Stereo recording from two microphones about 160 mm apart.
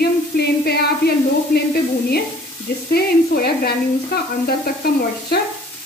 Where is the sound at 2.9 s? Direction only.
75° left (ahead or behind).